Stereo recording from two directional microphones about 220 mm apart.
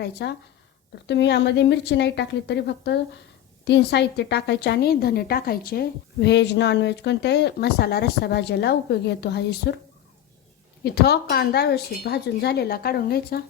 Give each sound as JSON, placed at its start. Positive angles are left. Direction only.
{"t": 0.0, "sound": "a woman's voice", "side_deg": 50}
{"t": 10.8, "sound": "a woman's voice", "side_deg": 45}